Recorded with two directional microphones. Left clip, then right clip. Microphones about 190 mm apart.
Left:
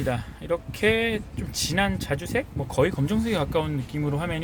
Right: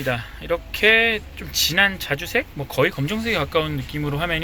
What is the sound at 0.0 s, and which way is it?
Speech, 15° left (ahead or behind).